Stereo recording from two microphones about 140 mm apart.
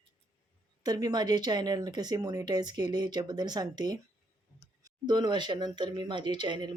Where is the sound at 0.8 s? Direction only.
30° right (ahead or behind).